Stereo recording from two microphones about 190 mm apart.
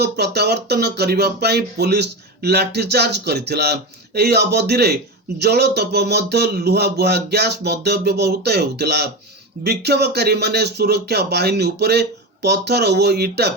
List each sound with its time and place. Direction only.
0.0 s speech: 60° right (ahead or behind)